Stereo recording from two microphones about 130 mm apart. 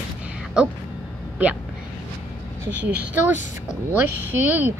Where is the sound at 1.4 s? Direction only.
10° right (ahead or behind).